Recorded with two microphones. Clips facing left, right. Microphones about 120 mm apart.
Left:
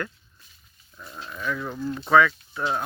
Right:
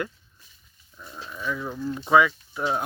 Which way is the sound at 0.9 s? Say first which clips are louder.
Left 1 dB; centre (ahead or behind).